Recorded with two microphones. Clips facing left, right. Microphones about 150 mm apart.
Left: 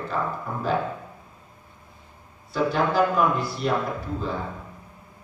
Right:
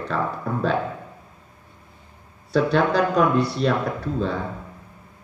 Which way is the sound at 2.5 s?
70° right (ahead or behind).